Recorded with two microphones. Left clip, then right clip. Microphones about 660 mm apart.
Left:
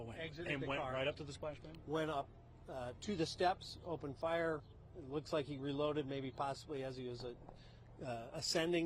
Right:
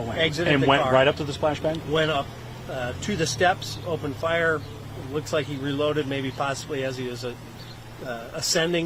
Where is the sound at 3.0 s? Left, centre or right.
Left.